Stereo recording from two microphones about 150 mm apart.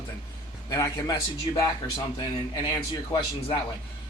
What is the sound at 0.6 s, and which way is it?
A man's voice, 25° left (ahead or behind).